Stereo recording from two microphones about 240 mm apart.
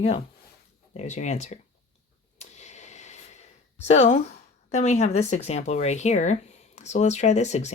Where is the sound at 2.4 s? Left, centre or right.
Left.